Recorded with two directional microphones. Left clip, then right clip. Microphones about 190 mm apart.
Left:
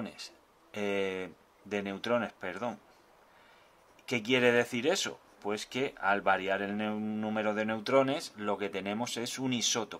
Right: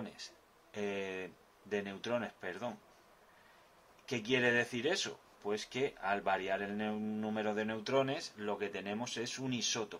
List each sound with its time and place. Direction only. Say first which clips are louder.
0.0 s speech: left 5 dB; 35° left (ahead or behind)
4.0 s speech: left 6 dB; 35° left (ahead or behind)